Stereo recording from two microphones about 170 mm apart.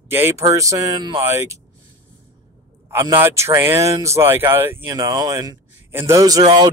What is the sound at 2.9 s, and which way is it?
Speech, 20° right (ahead or behind).